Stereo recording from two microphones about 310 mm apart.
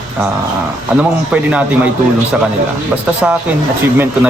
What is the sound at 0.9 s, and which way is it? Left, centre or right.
Speech, centre.